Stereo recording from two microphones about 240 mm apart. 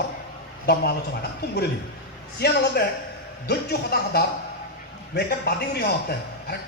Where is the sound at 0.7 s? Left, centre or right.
Left.